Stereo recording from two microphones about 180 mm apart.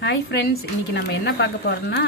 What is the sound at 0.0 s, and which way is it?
Speech, 65° left (ahead or behind).